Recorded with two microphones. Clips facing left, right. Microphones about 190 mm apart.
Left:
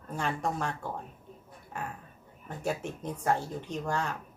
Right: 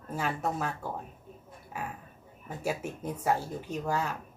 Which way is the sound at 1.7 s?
5° right (ahead or behind).